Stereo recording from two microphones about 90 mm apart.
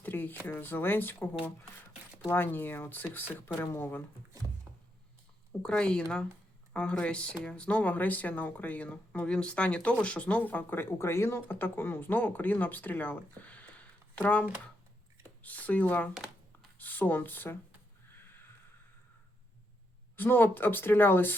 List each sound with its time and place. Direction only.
0.0 s a sound: 20° left (ahead or behind)
0.4 s speech: 20° left (ahead or behind)
5.6 s speech: 10° left (ahead or behind)
20.1 s speech: 20° left (ahead or behind)